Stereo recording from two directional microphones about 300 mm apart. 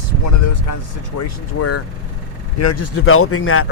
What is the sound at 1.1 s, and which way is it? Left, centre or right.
Speech, left.